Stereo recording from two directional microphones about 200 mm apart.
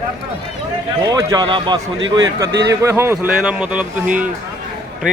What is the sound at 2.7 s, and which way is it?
Speech, 15° right (ahead or behind).